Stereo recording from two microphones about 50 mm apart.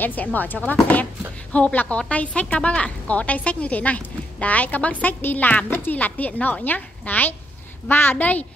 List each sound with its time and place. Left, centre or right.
0.0 s a child's voice: left